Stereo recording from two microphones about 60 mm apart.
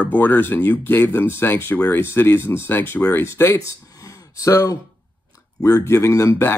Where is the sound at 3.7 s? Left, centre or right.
Left.